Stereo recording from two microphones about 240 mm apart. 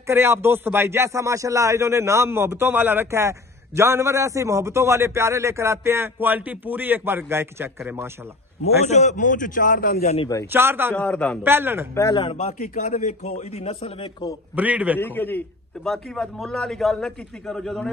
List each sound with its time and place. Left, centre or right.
0.0 s speech: centre
8.6 s a man's voice: left
10.1 s a man's voice: centre
10.5 s speech: centre
11.0 s a man's voice: centre
11.4 s speech: centre
11.9 s a man's voice: centre
14.5 s speech: centre
15.0 s a man's voice: centre